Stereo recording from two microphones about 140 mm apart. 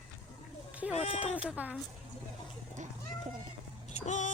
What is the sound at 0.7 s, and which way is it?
Sheep, 10° right (ahead or behind).